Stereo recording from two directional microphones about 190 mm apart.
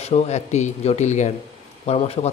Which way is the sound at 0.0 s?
35° left (ahead or behind).